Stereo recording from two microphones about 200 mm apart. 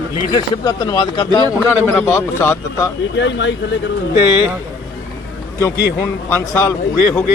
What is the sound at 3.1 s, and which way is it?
Speech, 65° left (ahead or behind).